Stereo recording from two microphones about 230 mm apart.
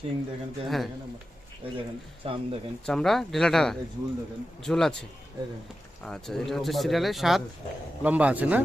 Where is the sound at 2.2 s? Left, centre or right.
Right.